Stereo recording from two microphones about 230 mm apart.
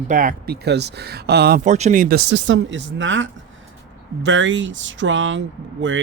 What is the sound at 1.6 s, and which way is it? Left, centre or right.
Speech, right.